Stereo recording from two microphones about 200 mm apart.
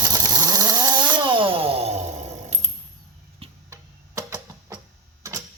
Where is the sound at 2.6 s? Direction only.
35° right (ahead or behind).